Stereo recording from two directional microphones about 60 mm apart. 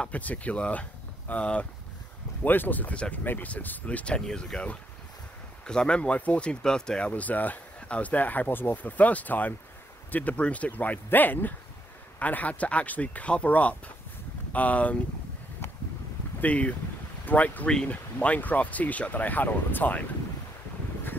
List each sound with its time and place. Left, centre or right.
0.0 s speech: left
2.4 s speech: left; by 7.1 s centre
7.1 s speech: left
16.3 s speech: left